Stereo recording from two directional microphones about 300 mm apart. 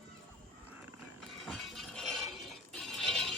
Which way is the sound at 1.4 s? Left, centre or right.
Centre.